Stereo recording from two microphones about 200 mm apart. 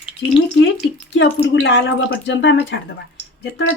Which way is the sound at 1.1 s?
60° left (ahead or behind).